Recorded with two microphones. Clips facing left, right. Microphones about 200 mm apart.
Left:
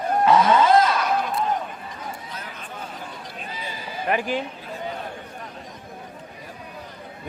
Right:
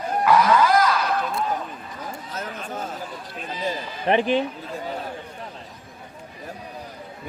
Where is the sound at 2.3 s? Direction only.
45° right (ahead or behind).